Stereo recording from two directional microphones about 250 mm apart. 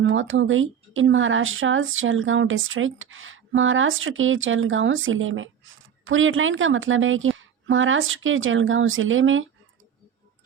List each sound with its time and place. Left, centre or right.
0.0 s speech: right